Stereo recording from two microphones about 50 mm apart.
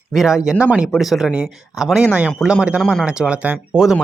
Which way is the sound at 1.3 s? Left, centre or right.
Centre.